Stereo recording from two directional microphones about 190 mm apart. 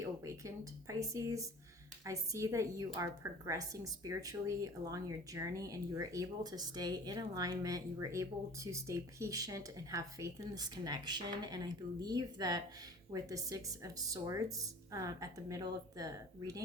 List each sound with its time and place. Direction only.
0.0 s a woman's voice: 15° right (ahead or behind)